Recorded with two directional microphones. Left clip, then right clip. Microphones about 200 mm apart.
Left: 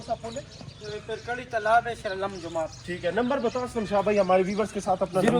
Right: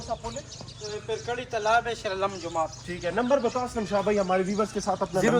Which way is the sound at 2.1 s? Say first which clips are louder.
Right 2 dB; 25° right (ahead or behind).